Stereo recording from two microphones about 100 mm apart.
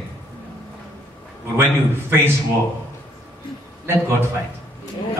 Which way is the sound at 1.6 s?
25° right (ahead or behind).